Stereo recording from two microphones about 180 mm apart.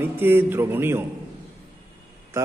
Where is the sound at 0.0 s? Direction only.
10° right (ahead or behind).